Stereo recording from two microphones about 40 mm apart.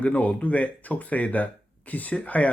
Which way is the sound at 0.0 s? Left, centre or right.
Left.